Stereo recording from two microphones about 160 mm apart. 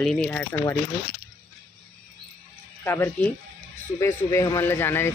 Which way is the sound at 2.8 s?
15° left (ahead or behind).